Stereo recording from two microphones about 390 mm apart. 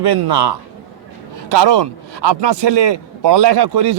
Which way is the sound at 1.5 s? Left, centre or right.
Right.